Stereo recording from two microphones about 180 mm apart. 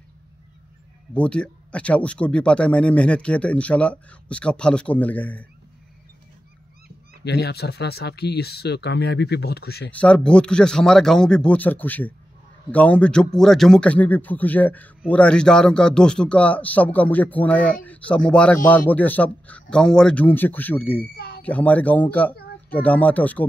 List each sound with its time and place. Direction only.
1.1 s a man's voice: 5° left (ahead or behind)
7.2 s speech: 65° left (ahead or behind)
9.8 s a man's voice: 5° left (ahead or behind)